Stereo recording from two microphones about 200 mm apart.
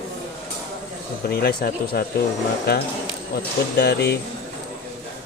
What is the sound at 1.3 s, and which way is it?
Speech, 50° left (ahead or behind).